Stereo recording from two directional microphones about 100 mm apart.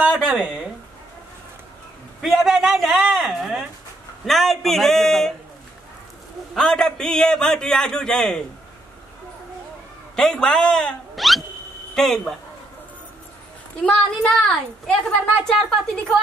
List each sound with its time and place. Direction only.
0.0 s speech: 10° right (ahead or behind)
2.2 s a sound: centre (ahead or behind)
4.3 s speech: centre (ahead or behind)
6.5 s a man's voice: 5° left (ahead or behind)
10.1 s speech: 5° left (ahead or behind)
13.8 s a man's voice: 5° left (ahead or behind)